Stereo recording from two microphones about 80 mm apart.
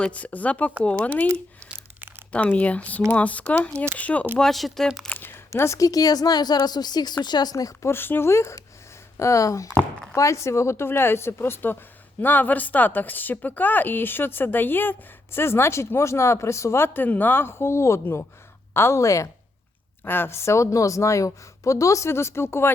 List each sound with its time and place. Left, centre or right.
0.0 s speech: centre
2.3 s a woman's voice: centre
4.4 s speech: centre
5.0 s a sound: left
5.5 s a woman's voice: left
7.5 s a woman's voice: left
7.9 s a woman's voice: left
20.1 s a woman's voice: left